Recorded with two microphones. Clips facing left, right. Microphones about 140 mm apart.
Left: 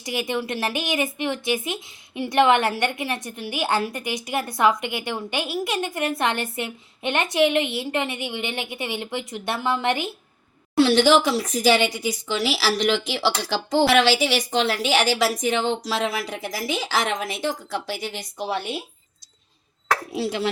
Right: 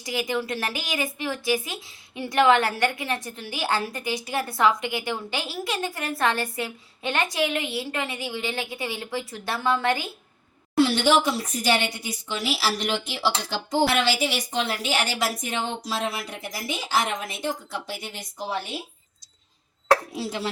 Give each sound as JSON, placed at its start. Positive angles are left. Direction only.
{"t": 0.0, "sound": "a woman's voice", "side_deg": 25}
{"t": 10.8, "sound": "a woman's voice", "side_deg": 90}
{"t": 20.1, "sound": "speech", "side_deg": 70}